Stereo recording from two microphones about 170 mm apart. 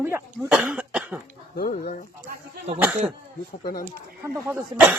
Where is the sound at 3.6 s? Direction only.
60° left (ahead or behind).